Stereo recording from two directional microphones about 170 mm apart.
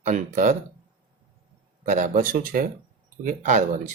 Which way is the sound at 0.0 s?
45° right (ahead or behind).